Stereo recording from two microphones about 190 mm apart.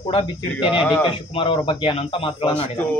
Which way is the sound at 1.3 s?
30° left (ahead or behind).